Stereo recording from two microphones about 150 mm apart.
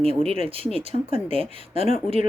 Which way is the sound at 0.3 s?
40° right (ahead or behind).